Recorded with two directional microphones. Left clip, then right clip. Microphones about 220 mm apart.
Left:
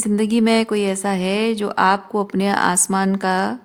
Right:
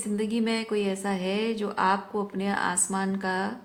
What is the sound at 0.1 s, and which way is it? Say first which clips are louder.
Speech: left 11 dB; 55° left (ahead or behind).